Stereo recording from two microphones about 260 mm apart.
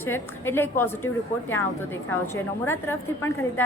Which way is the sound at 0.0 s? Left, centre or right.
Centre.